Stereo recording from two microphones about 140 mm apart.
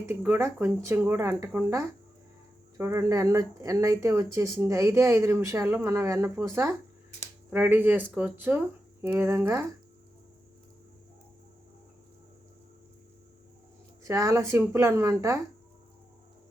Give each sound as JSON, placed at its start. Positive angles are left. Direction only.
{"t": 0.1, "sound": "speech", "side_deg": -15}
{"t": 14.0, "sound": "speech", "side_deg": -20}